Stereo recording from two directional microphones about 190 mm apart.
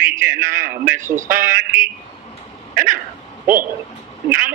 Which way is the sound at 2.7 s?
45° right (ahead or behind).